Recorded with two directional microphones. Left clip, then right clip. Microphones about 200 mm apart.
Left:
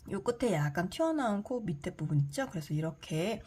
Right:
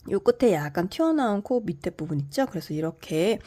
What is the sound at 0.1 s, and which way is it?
A woman's voice, 40° right (ahead or behind).